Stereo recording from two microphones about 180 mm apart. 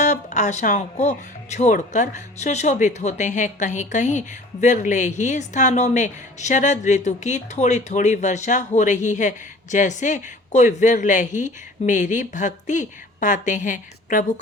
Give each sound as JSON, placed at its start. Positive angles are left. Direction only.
{"t": 0.0, "sound": "a woman's voice", "side_deg": 40}